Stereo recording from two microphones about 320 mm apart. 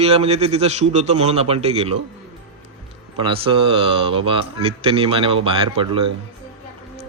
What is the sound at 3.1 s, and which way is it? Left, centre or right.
Speech, centre.